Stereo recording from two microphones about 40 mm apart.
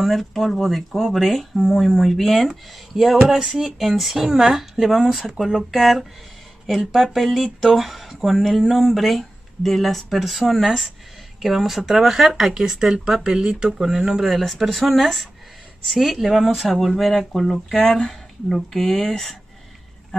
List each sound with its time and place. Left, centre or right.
0.0 s speech: centre
7.2 s speech: centre
14.2 s speech: centre